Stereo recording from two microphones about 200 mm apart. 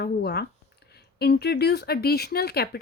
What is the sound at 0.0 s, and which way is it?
Speech, 55° left (ahead or behind).